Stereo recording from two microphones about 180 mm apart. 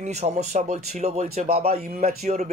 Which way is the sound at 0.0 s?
40° right (ahead or behind).